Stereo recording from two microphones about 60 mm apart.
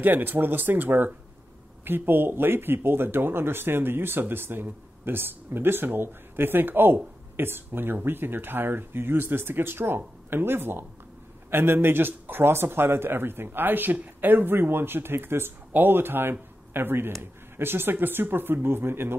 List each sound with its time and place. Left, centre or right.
0.0 s speech: right